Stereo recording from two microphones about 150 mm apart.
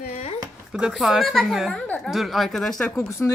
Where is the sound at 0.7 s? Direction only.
5° right (ahead or behind).